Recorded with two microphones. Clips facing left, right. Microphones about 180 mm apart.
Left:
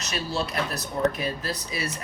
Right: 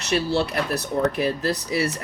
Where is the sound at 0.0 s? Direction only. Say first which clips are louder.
Right 7 dB; 65° right (ahead or behind).